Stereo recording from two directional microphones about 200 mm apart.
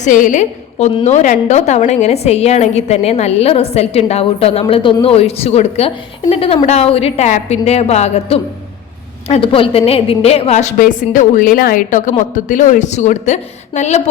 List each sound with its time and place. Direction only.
0.0 s a woman's voice: 40° left (ahead or behind)